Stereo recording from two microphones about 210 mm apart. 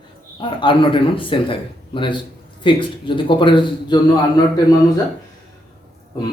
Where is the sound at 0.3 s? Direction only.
25° left (ahead or behind).